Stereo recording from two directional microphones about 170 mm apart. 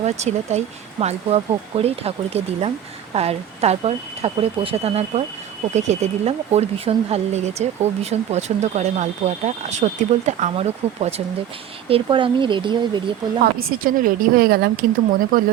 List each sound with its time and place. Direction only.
0.0 s speech: 40° right (ahead or behind)
13.4 s speech: 60° right (ahead or behind)